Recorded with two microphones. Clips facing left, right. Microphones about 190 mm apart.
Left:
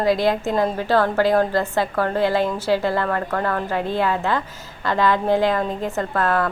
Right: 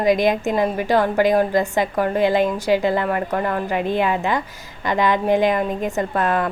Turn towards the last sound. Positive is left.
turn(degrees=-20)  # may be behind; listen again after turning